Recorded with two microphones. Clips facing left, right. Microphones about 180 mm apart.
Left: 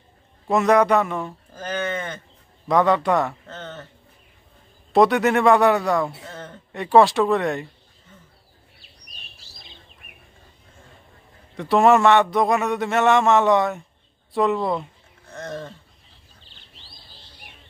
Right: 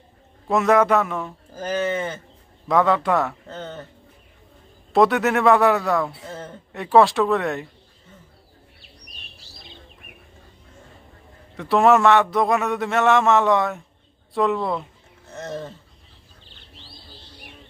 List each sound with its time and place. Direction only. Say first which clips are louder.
0.5 s a man's voice: even; centre (ahead or behind)
4.9 s a man's voice: left 1 dB; centre (ahead or behind)
11.5 s a man's voice: even; centre (ahead or behind)